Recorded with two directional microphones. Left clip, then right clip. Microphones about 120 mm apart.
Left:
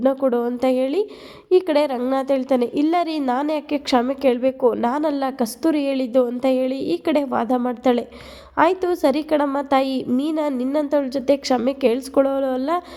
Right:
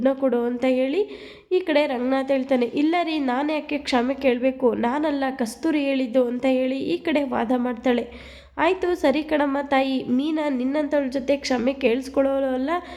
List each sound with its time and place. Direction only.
0.0 s a woman's voice: 40° left (ahead or behind)